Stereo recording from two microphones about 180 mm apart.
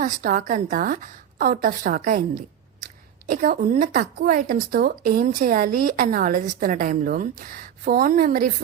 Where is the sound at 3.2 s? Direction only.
50° right (ahead or behind).